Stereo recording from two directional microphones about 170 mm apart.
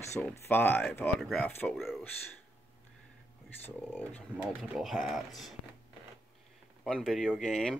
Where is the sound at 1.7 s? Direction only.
Centre (ahead or behind).